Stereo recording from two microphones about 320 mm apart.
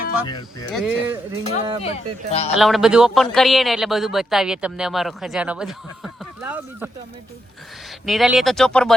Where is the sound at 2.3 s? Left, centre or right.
Centre.